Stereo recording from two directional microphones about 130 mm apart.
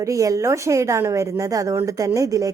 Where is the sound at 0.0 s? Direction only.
25° right (ahead or behind).